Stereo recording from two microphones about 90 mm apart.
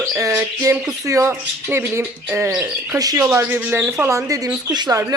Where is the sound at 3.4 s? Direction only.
25° right (ahead or behind); by 5.1 s 40° right (ahead or behind).